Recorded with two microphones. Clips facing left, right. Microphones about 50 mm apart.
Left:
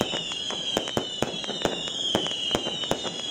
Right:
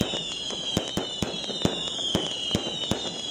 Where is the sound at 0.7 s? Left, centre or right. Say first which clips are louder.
Left 2 dB; left.